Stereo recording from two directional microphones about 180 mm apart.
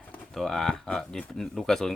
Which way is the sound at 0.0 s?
5° left (ahead or behind).